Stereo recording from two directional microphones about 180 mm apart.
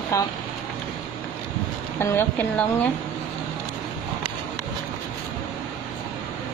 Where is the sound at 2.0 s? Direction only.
10° left (ahead or behind).